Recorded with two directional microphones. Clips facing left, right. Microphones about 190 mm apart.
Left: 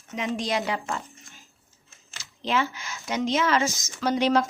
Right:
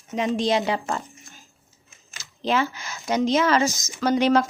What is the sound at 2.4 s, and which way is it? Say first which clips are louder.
A woman's voice: right 3 dB; 40° right (ahead or behind).